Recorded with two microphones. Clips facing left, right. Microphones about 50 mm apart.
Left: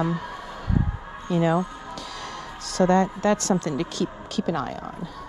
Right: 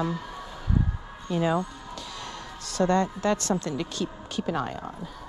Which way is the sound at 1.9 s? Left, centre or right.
Left.